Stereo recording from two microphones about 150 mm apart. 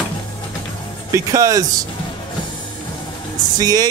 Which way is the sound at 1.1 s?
20° right (ahead or behind).